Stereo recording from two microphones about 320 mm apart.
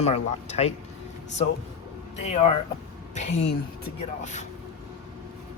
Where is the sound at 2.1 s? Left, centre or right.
Left.